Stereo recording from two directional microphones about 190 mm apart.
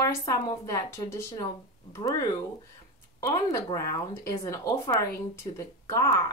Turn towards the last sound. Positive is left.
turn(degrees=15)  # may be behind; listen again after turning